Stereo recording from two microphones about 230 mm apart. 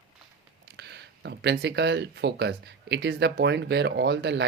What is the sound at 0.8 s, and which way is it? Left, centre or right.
Speech, right.